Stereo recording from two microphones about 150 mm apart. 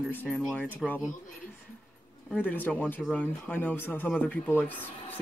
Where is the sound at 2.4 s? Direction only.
10° left (ahead or behind).